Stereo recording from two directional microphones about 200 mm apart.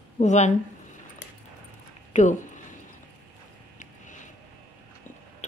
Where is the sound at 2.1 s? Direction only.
35° left (ahead or behind).